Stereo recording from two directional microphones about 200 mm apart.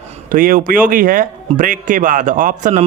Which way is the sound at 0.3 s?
45° right (ahead or behind).